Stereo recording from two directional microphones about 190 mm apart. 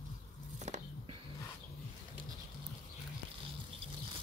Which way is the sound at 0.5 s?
40° right (ahead or behind).